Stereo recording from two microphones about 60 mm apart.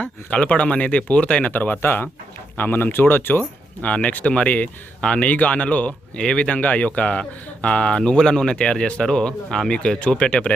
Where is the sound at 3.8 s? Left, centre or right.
Left.